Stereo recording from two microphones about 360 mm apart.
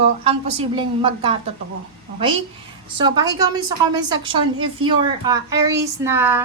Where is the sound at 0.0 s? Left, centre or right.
Centre.